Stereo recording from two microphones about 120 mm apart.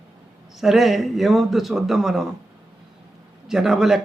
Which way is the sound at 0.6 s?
Centre (ahead or behind).